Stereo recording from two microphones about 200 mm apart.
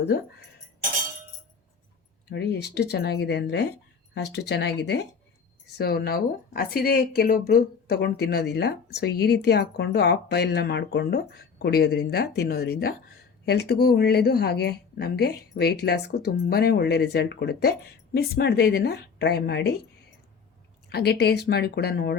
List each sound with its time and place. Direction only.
2.3 s speech: 60° left (ahead or behind)
20.9 s speech: 55° left (ahead or behind)